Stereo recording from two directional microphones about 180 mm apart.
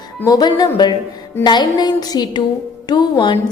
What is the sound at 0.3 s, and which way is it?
A woman's voice, 20° left (ahead or behind).